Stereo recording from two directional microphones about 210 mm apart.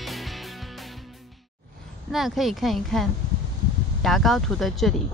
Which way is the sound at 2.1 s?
Centre (ahead or behind).